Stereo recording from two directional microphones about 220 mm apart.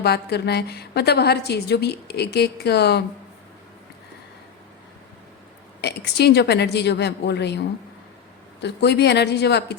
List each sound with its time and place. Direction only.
0.0 s a woman's voice: 45° left (ahead or behind)
5.8 s a woman's voice: 50° left (ahead or behind)
8.6 s a woman's voice: 50° left (ahead or behind)